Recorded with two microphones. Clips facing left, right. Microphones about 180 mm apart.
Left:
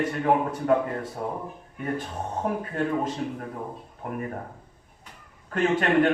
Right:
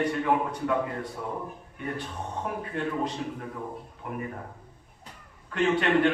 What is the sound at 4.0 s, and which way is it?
Speech, 45° left (ahead or behind).